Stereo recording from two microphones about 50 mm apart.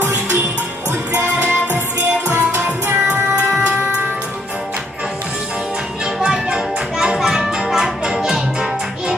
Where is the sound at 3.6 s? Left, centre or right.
Right.